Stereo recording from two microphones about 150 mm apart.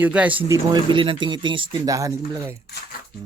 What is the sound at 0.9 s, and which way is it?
Speech, 35° right (ahead or behind).